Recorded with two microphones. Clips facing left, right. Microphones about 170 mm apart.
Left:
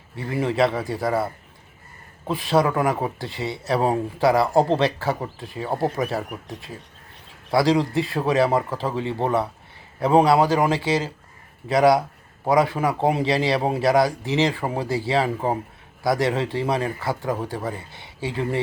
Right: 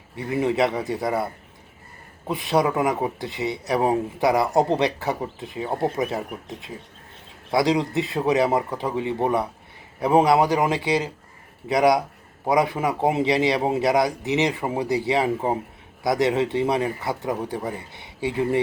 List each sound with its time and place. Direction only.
0.2 s speech: 20° right (ahead or behind)